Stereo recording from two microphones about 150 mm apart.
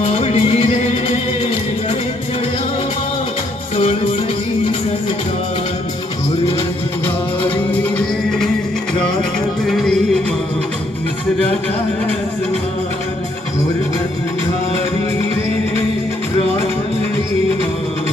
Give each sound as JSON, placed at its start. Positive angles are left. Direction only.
{"t": 0.0, "sound": "music", "side_deg": 45}
{"t": 7.7, "sound": "music", "side_deg": 10}
{"t": 9.6, "sound": "music", "side_deg": 0}